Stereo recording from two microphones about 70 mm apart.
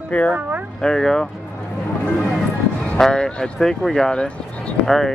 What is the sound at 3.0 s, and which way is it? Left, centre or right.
Speech, centre.